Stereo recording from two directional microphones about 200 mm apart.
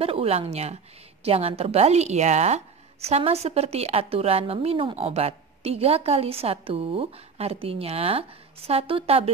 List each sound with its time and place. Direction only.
0.0 s a woman's voice: 30° right (ahead or behind)